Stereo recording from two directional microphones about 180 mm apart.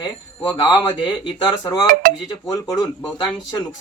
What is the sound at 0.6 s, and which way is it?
Speech, 25° left (ahead or behind).